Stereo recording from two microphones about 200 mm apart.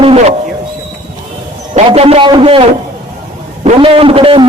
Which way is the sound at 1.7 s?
30° right (ahead or behind).